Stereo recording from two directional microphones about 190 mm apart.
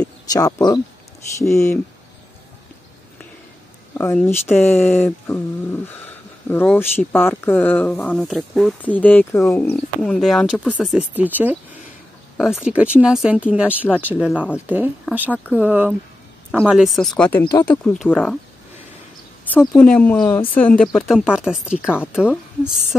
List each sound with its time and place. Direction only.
0.3 s speech: 20° left (ahead or behind)
4.0 s speech: 10° left (ahead or behind); by 13.7 s 5° right (ahead or behind)
13.8 s speech: 10° left (ahead or behind)
14.1 s speech: 5° right (ahead or behind)
19.6 s speech: 5° left (ahead or behind)